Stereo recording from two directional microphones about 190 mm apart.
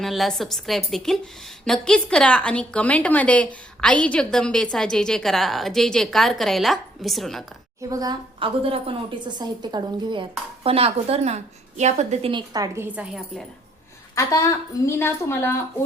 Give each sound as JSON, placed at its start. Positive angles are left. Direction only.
{"t": 0.0, "sound": "a woman's voice", "side_deg": 0}
{"t": 7.8, "sound": "a woman's voice", "side_deg": -20}
{"t": 14.2, "sound": "a woman's voice", "side_deg": 15}